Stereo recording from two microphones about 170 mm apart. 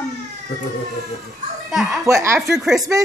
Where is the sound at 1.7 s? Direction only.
Centre (ahead or behind).